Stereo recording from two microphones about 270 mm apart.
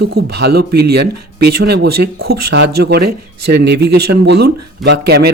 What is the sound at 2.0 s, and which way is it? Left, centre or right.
Speech, right.